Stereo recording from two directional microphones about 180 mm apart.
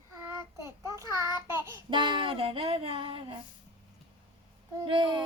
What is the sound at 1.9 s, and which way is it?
Music, 25° right (ahead or behind).